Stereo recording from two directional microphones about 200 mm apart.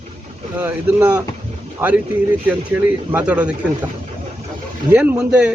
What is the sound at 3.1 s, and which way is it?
Speech, 5° right (ahead or behind).